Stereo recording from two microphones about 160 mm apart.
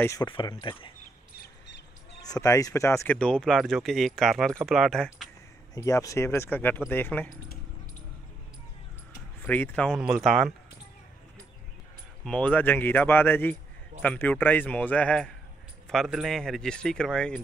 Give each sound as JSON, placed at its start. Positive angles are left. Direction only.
{"t": 0.0, "sound": "speech", "side_deg": 20}
{"t": 0.3, "sound": "speech", "side_deg": 30}
{"t": 2.2, "sound": "speech", "side_deg": 20}
{"t": 3.2, "sound": "speech", "side_deg": 5}
{"t": 5.8, "sound": "speech", "side_deg": 20}
{"t": 9.4, "sound": "speech", "side_deg": 10}
{"t": 12.3, "sound": "speech", "side_deg": 10}